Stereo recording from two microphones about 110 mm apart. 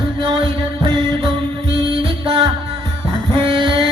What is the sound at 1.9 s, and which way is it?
Music, 50° right (ahead or behind).